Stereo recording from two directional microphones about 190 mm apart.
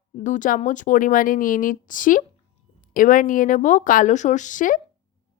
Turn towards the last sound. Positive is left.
turn(degrees=45)  # may be behind; listen again after turning